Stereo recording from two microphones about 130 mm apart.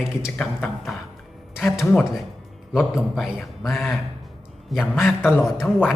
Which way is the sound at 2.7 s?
5° right (ahead or behind).